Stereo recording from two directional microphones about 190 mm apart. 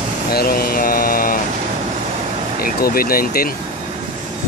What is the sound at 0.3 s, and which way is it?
Mantra, 55° left (ahead or behind).